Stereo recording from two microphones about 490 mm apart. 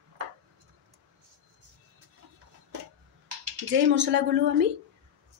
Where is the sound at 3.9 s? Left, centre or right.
Right.